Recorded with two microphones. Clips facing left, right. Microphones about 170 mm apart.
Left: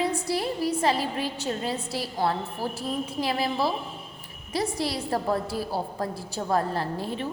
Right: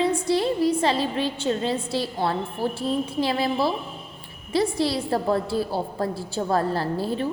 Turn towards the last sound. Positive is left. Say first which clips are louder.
# right 4 dB
turn(degrees=-35)  # may be behind; listen again after turning